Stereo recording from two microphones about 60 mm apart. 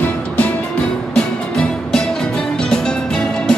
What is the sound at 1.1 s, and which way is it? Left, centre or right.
Music, centre.